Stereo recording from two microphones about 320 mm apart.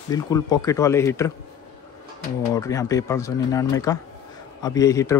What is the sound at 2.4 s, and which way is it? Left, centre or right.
Speech, centre.